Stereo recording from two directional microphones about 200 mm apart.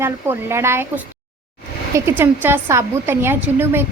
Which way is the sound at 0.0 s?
10° right (ahead or behind).